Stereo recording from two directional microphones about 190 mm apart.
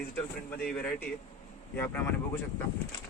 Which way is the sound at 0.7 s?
5° left (ahead or behind).